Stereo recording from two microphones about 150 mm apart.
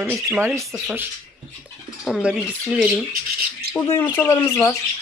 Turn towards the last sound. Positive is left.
turn(degrees=20)  # may be behind; listen again after turning